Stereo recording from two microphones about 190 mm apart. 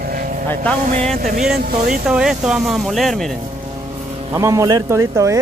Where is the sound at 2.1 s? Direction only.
5° right (ahead or behind).